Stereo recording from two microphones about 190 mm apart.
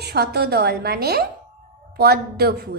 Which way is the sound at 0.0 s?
55° right (ahead or behind).